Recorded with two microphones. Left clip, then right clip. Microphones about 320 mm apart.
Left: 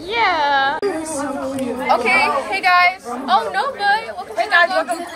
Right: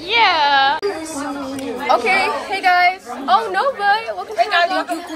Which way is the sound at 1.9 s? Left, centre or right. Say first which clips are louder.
Even; centre.